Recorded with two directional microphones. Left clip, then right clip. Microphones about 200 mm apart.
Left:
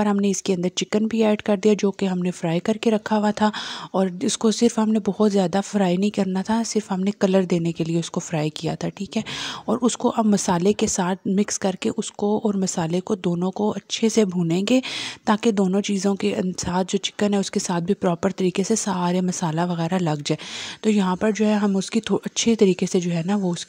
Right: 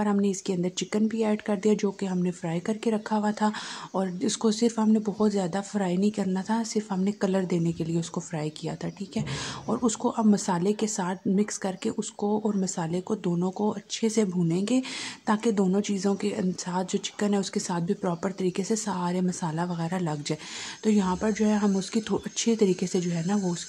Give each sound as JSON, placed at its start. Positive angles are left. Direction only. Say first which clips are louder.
{"t": 0.0, "sound": "a woman's voice", "louder": "left 5 dB", "side_deg": 40}